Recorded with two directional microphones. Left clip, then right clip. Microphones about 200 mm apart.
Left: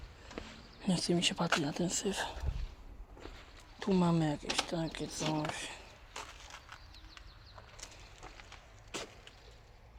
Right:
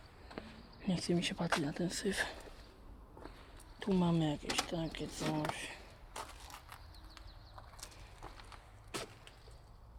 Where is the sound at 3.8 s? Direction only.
15° left (ahead or behind).